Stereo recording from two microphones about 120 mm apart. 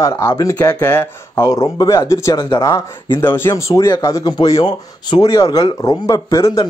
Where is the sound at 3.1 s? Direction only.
20° left (ahead or behind).